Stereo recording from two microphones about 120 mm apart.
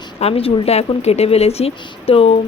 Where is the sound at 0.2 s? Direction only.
55° left (ahead or behind).